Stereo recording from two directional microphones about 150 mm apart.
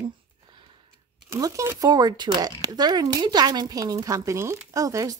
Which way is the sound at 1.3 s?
20° right (ahead or behind).